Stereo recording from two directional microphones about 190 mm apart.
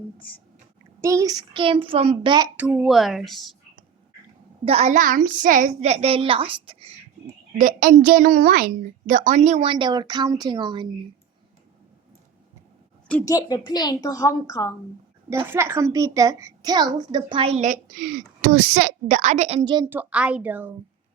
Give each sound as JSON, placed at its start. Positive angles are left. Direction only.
{"t": 1.0, "sound": "a child's voice", "side_deg": -15}
{"t": 2.6, "sound": "speech", "side_deg": -5}
{"t": 4.6, "sound": "a woman's voice", "side_deg": -35}
{"t": 7.6, "sound": "a woman's voice", "side_deg": -45}
{"t": 13.1, "sound": "a woman's voice", "side_deg": 15}
{"t": 15.3, "sound": "a child's voice", "side_deg": -15}
{"t": 19.7, "sound": "a woman's voice", "side_deg": -15}